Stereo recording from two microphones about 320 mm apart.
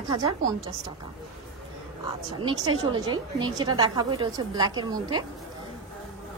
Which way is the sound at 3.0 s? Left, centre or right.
Centre.